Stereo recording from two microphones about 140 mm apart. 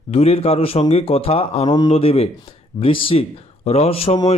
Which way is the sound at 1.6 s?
30° left (ahead or behind).